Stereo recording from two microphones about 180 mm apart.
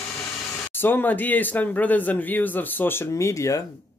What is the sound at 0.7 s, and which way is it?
A man's voice, 10° left (ahead or behind).